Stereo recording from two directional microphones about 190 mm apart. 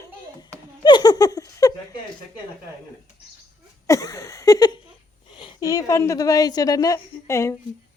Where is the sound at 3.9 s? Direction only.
15° left (ahead or behind).